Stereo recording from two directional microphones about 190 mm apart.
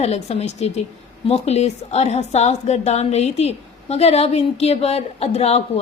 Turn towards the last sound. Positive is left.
turn(degrees=35)  # may be behind; listen again after turning